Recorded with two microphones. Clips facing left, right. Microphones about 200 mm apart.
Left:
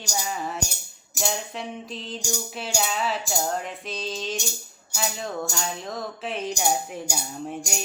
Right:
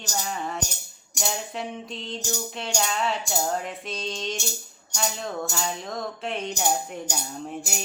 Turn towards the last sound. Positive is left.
turn(degrees=-5)  # may be behind; listen again after turning